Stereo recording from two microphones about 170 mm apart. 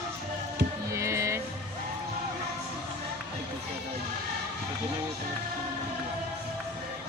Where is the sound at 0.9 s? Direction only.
15° right (ahead or behind).